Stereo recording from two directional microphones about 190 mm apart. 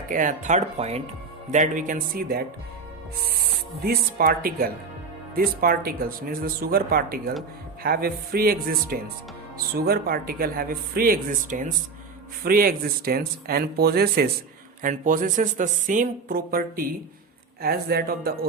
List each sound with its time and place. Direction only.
0.1 s speech: 40° right (ahead or behind)
3.8 s speech: 50° right (ahead or behind)
14.8 s speech: 45° right (ahead or behind)